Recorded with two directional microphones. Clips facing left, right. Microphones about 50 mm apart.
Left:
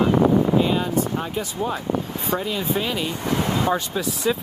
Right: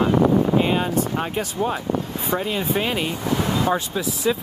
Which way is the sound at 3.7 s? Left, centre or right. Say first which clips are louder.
Even; centre.